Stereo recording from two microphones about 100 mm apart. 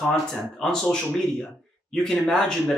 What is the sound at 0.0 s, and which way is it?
Speech, 5° left (ahead or behind).